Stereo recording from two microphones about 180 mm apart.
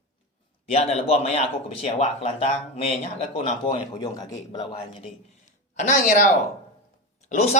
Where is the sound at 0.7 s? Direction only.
35° left (ahead or behind).